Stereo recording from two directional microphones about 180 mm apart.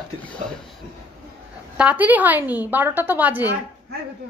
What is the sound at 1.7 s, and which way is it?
A woman's voice, 10° right (ahead or behind).